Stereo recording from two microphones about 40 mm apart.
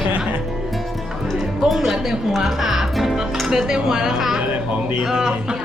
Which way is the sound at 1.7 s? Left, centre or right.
Centre.